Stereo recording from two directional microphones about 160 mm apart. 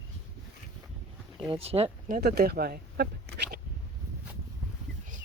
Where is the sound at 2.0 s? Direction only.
70° right (ahead or behind).